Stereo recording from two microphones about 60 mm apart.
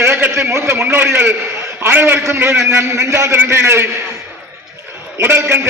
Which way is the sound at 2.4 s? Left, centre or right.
Right.